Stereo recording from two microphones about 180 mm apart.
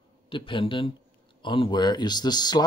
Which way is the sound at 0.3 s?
30° left (ahead or behind).